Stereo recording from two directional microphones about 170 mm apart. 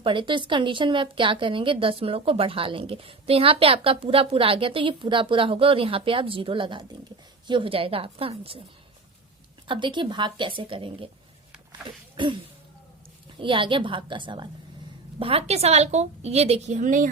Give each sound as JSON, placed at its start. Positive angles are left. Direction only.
{"t": 0.0, "sound": "a woman's voice", "side_deg": -30}
{"t": 9.6, "sound": "a woman's voice", "side_deg": -30}